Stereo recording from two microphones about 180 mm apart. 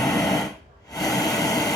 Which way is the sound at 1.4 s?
20° left (ahead or behind).